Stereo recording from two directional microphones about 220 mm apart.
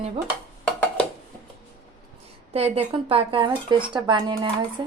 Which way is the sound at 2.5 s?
25° right (ahead or behind).